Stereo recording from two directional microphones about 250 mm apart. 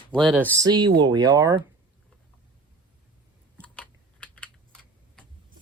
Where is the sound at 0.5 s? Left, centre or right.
Centre.